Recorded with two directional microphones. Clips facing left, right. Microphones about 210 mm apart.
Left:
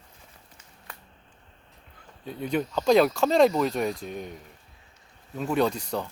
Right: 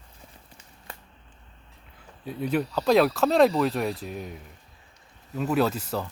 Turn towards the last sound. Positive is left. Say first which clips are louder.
# even
turn(degrees=-5)  # may be behind; listen again after turning